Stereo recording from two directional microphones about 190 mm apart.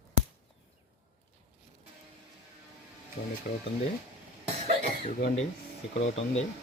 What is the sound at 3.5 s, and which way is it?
Speech, 50° left (ahead or behind).